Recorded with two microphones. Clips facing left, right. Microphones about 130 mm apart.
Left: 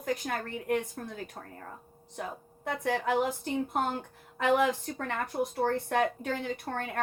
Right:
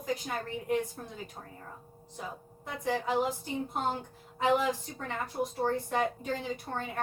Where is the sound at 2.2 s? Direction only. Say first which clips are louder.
Left 4 dB; 60° left (ahead or behind).